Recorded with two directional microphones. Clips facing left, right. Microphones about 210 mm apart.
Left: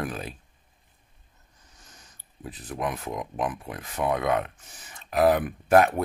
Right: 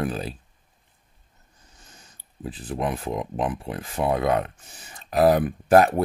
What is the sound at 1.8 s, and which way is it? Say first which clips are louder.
Speech: right 2 dB; 30° right (ahead or behind).